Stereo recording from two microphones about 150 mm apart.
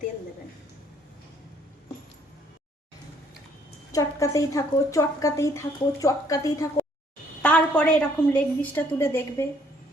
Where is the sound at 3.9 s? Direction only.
20° left (ahead or behind).